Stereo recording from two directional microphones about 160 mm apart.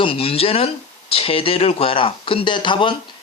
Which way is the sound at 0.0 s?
35° left (ahead or behind).